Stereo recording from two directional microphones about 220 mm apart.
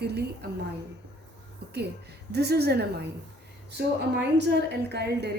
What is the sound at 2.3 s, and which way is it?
Speech, 50° right (ahead or behind).